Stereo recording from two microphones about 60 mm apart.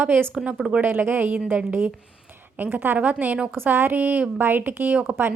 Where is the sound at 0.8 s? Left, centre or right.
Right.